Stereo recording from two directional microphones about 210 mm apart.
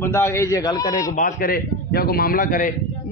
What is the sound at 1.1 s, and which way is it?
A man's voice, 40° left (ahead or behind).